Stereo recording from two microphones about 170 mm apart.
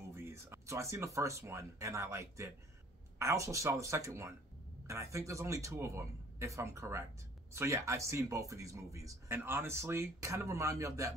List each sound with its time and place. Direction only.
0.1 s speech: 15° right (ahead or behind)